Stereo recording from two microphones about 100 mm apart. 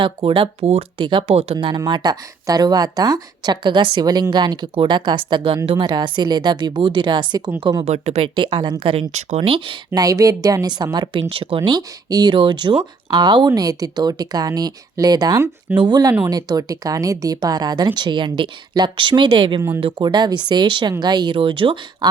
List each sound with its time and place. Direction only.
0.0 s speech: 55° right (ahead or behind); by 1.5 s 80° right
1.7 s speech: 45° right (ahead or behind)
5.7 s speech: 45° right (ahead or behind)
7.9 s speech: 90° right
8.4 s speech: 50° right (ahead or behind)
8.8 s speech: 75° right (ahead or behind); by 9.7 s 60° right (ahead or behind)
9.9 s speech: 35° right (ahead or behind)
11.3 s speech: 65° right (ahead or behind)
11.8 s speech: 40° right (ahead or behind)
12.3 s speech: 50° right (ahead or behind)
13.5 s speech: 40° right (ahead or behind); by 21.8 s 60° right (ahead or behind)